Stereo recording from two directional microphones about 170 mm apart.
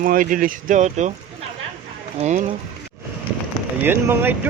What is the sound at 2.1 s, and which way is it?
Speech, 45° right (ahead or behind).